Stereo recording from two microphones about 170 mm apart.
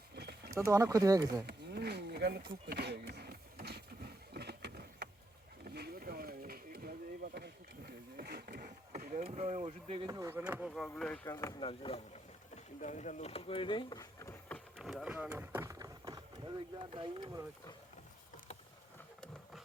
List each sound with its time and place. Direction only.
0.2 s a sound: 75° right (ahead or behind)
0.5 s speech: 20° right (ahead or behind)
1.5 s wild animals: 70° right (ahead or behind)
2.6 s a sound: 75° right (ahead or behind)
8.9 s vehicle: 50° right (ahead or behind)
9.2 s speech: 40° right (ahead or behind)
10.2 s speech: 15° right (ahead or behind); by 11.5 s 15° left (ahead or behind)
11.6 s speech: 30° left (ahead or behind)
12.8 s speech: 45° left (ahead or behind); by 17.4 s 30° right (ahead or behind)